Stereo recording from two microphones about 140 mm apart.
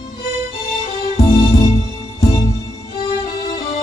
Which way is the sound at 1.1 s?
45° left (ahead or behind).